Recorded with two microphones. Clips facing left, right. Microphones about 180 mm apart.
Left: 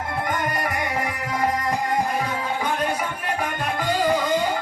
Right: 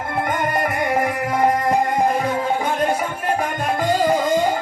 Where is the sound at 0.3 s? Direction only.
55° right (ahead or behind).